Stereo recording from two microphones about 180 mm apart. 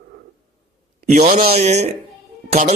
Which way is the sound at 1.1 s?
40° right (ahead or behind).